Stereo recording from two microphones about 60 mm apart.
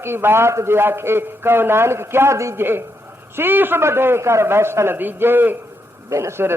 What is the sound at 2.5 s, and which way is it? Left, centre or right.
A man's voice, right.